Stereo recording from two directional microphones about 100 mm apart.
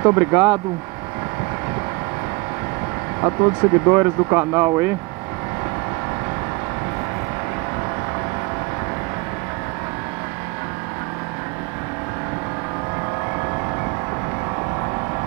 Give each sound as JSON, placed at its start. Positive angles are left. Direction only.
{"t": 0.0, "sound": "speech", "side_deg": -25}
{"t": 3.2, "sound": "speech", "side_deg": -30}